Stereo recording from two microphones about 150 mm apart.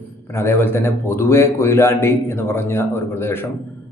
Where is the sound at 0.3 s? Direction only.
15° left (ahead or behind).